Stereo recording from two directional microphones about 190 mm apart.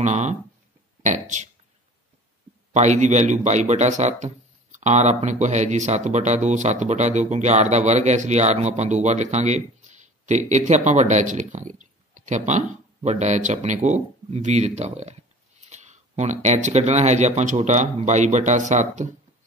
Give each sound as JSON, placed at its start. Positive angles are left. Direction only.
{"t": 0.0, "sound": "speech", "side_deg": -40}
{"t": 2.7, "sound": "speech", "side_deg": -40}